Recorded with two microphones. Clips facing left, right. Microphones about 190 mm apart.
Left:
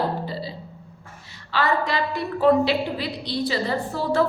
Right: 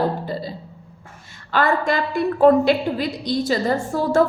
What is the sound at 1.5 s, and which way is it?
A woman's voice, 50° right (ahead or behind).